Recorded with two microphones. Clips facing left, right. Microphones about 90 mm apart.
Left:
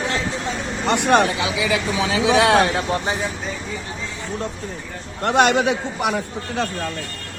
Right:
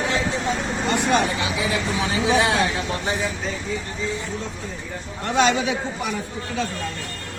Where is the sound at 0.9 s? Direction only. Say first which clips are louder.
Left 5 dB; 70° left (ahead or behind).